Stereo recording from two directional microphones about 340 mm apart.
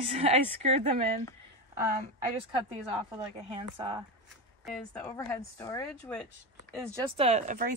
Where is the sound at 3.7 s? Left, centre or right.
Centre.